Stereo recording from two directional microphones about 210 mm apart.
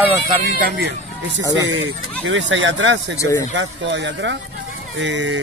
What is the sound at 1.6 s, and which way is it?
Speech, 60° right (ahead or behind).